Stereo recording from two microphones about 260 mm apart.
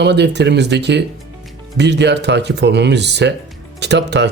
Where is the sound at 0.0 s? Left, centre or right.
Right.